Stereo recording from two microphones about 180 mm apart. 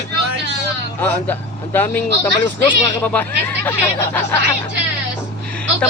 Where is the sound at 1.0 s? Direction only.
10° left (ahead or behind).